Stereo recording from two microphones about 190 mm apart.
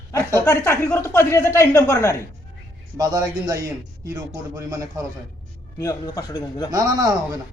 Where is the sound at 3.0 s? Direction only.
20° right (ahead or behind).